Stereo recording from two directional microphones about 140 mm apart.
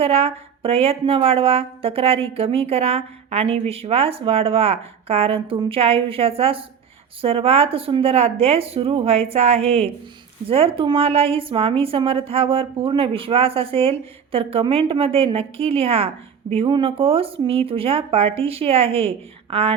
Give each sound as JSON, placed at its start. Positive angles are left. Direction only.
{"t": 0.0, "sound": "a woman's voice", "side_deg": -45}